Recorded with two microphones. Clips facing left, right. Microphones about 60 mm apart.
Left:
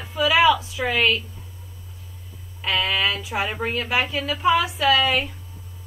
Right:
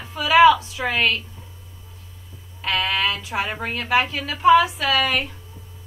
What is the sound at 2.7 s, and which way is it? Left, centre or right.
Speech, right.